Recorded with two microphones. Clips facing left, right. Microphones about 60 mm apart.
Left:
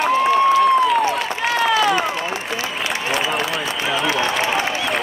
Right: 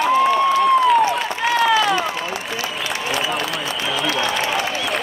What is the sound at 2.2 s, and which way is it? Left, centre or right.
Applause, left.